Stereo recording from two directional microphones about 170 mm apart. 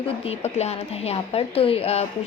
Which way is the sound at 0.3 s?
40° left (ahead or behind).